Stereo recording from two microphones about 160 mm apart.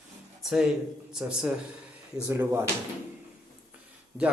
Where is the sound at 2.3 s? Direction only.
15° right (ahead or behind).